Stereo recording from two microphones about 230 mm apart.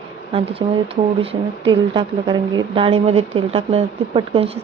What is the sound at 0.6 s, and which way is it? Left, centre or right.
Speech, centre.